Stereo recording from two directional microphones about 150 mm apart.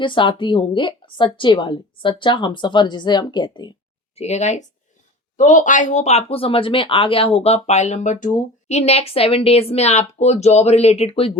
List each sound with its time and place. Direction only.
0.0 s a woman's voice: 35° left (ahead or behind)
4.1 s speech: 45° left (ahead or behind)